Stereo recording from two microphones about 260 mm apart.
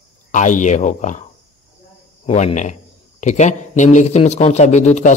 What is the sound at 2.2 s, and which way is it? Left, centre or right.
A man's voice, left.